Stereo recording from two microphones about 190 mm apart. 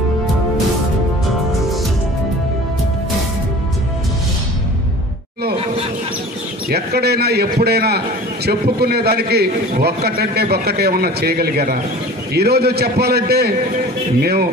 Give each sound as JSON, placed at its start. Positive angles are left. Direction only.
{"t": 6.7, "sound": "a man's voice", "side_deg": -55}